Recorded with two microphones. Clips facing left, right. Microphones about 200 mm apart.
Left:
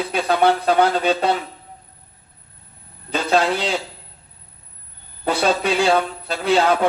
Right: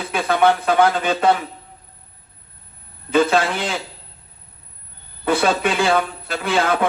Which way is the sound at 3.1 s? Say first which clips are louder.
Right 2 dB; 50° right (ahead or behind).